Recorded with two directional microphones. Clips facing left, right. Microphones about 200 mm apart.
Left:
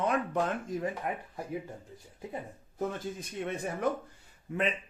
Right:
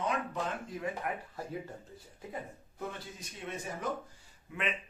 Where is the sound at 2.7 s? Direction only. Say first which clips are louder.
Left 8 dB; 50° left (ahead or behind).